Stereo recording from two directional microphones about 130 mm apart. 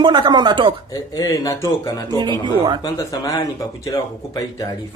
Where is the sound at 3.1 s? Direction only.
25° left (ahead or behind).